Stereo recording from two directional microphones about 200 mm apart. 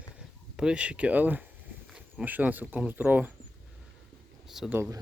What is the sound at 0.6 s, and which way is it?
Speech, 5° right (ahead or behind).